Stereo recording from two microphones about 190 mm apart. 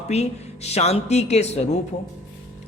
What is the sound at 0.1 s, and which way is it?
A man's voice, 35° left (ahead or behind).